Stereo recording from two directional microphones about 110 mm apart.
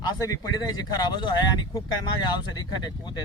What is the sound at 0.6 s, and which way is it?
Speech, 40° left (ahead or behind).